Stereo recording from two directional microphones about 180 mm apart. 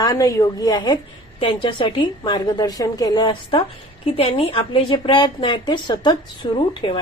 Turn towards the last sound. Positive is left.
turn(degrees=25)  # may be behind; listen again after turning